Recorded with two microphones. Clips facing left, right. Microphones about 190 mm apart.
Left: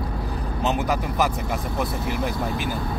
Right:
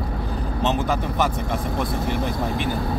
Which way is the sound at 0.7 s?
30° right (ahead or behind).